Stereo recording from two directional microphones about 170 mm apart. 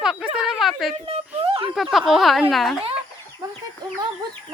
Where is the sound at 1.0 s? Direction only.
35° right (ahead or behind).